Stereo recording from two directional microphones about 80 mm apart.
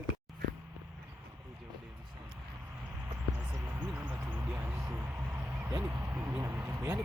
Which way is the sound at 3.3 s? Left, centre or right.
Centre.